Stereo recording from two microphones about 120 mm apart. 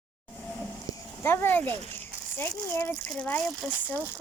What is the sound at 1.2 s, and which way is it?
Speech, 20° left (ahead or behind).